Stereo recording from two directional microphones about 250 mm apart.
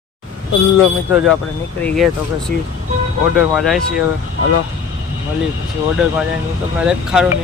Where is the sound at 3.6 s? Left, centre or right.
Centre.